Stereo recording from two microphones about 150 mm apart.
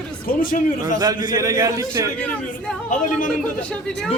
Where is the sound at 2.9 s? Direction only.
60° left (ahead or behind).